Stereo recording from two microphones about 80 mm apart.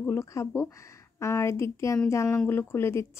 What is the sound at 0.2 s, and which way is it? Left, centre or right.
Speech, left.